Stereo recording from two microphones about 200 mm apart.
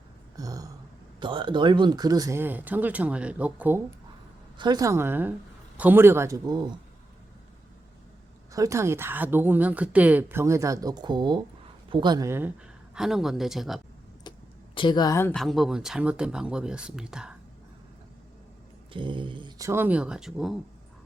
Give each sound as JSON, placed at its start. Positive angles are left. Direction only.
{"t": 0.3, "sound": "speech", "side_deg": -15}
{"t": 4.5, "sound": "speech", "side_deg": -20}
{"t": 8.5, "sound": "speech", "side_deg": -15}
{"t": 14.3, "sound": "a sound", "side_deg": 20}
{"t": 14.8, "sound": "speech", "side_deg": 20}
{"t": 18.9, "sound": "speech", "side_deg": -25}